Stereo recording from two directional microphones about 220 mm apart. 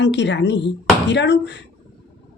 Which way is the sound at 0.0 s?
55° left (ahead or behind).